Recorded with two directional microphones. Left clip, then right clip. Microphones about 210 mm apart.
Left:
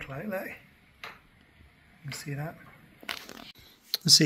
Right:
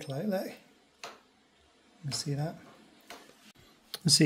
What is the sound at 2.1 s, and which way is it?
Speech, 35° right (ahead or behind).